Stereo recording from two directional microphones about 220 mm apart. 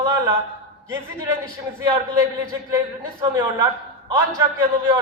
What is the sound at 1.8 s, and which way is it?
A man's voice, 15° right (ahead or behind).